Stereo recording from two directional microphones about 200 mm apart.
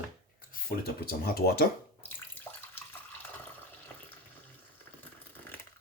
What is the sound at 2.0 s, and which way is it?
Bathtub, 10° left (ahead or behind).